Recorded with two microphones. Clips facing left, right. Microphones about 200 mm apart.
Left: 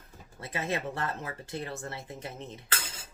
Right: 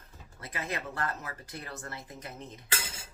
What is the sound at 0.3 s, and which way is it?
Speech, 25° left (ahead or behind).